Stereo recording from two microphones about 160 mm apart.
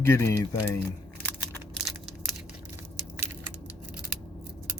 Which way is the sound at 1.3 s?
10° left (ahead or behind).